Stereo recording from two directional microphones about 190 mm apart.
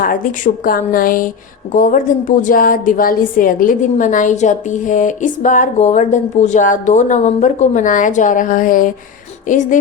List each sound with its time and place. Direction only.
0.0 s a woman's voice: 45° left (ahead or behind)